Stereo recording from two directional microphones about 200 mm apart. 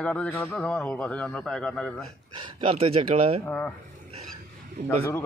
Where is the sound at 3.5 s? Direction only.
10° left (ahead or behind).